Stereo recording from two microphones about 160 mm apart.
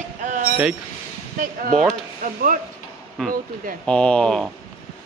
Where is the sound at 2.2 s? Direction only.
60° right (ahead or behind).